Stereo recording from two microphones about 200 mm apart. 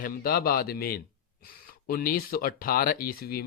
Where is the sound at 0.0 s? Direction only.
50° left (ahead or behind).